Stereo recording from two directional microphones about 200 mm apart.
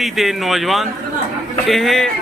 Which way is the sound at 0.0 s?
Centre (ahead or behind).